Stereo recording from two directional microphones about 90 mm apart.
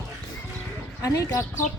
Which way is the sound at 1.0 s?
35° left (ahead or behind).